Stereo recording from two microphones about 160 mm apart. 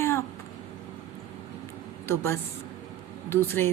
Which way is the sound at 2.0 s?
15° left (ahead or behind).